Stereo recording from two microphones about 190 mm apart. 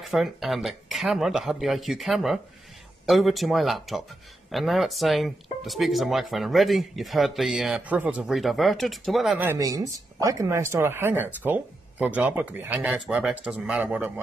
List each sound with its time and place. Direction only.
0.0 s speech: centre (ahead or behind)
9.5 s speech: 15° right (ahead or behind)